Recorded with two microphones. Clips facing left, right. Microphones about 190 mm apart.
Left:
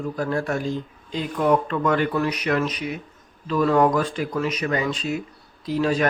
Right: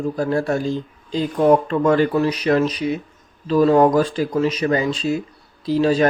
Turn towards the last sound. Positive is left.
turn(degrees=-30)  # may be behind; listen again after turning